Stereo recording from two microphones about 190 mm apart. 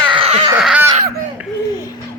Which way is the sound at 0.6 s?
5° right (ahead or behind).